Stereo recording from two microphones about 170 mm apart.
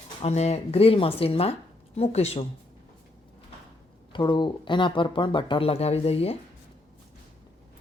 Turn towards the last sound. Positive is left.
turn(degrees=35)  # may be behind; listen again after turning